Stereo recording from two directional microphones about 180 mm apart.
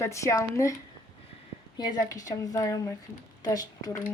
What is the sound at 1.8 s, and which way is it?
Speech, 20° left (ahead or behind).